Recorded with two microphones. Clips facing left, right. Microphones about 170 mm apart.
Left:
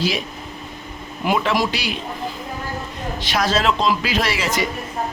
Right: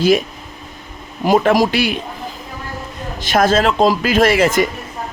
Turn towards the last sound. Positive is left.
turn(degrees=-50)  # may be behind; listen again after turning